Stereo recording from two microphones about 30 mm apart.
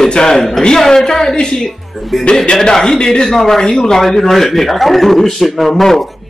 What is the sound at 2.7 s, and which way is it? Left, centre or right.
A woman's voice, left.